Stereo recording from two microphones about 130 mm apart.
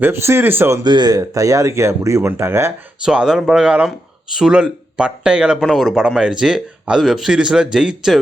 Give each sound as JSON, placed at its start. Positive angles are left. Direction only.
{"t": 0.0, "sound": "speech", "side_deg": -20}
{"t": 0.9, "sound": "speech", "side_deg": -35}
{"t": 3.0, "sound": "a man's voice", "side_deg": -5}